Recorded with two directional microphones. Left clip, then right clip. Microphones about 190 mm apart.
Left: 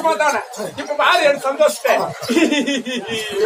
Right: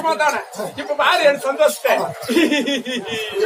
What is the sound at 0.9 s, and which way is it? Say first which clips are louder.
A man's voice: left 1 dB; 30° right (ahead or behind).